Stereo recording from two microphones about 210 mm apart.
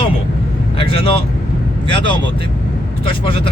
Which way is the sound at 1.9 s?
20° left (ahead or behind).